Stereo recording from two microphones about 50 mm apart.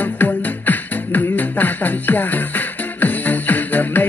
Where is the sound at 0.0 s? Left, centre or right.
Left.